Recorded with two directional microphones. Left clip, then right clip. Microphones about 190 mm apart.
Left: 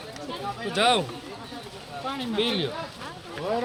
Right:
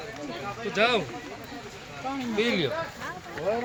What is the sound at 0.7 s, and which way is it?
Speech, 50° left (ahead or behind).